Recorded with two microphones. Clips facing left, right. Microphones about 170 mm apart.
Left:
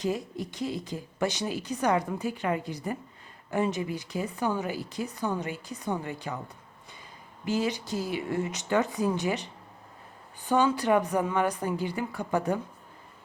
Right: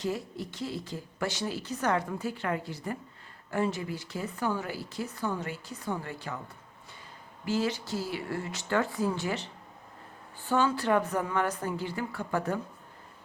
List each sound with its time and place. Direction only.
0.0 s speech: 15° left (ahead or behind)
7.4 s speech: 15° left (ahead or behind)